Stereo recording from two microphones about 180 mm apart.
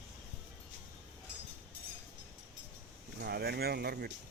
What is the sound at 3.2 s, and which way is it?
Speech, 60° right (ahead or behind).